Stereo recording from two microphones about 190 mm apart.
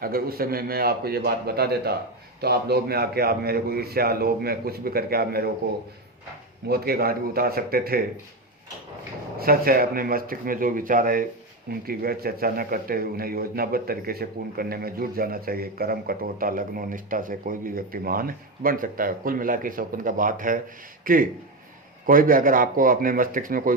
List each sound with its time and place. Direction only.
0.0 s a man's voice: 50° right (ahead or behind)
6.7 s a man's voice: 55° right (ahead or behind)
9.4 s a man's voice: 50° right (ahead or behind)